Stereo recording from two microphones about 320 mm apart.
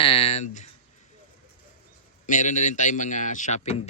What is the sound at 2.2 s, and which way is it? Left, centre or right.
Speech, left.